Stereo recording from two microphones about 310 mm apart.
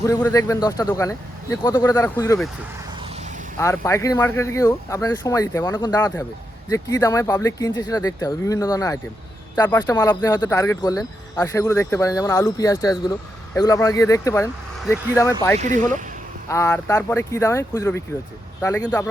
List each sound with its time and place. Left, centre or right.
0.0 s speech: centre
3.6 s speech: centre
15.5 s speech: right
16.5 s speech: centre